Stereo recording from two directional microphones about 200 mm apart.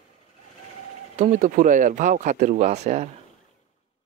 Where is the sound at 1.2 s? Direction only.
40° right (ahead or behind).